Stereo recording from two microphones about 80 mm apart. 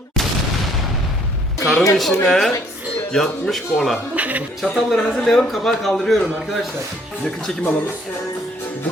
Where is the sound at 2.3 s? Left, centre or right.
Centre.